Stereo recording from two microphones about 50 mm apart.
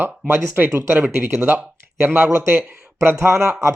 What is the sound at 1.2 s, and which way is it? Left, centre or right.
A man's voice, right.